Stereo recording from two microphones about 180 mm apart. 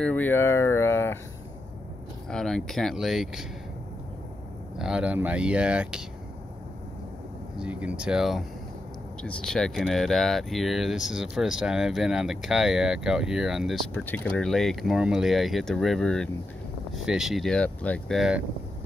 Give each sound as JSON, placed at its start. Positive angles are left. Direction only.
{"t": 0.0, "sound": "speech", "side_deg": 10}
{"t": 2.2, "sound": "speech", "side_deg": 5}
{"t": 4.7, "sound": "speech", "side_deg": -5}
{"t": 7.5, "sound": "speech", "side_deg": -5}